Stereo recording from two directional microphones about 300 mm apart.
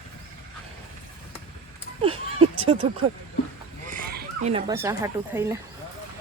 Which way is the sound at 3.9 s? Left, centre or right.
Right.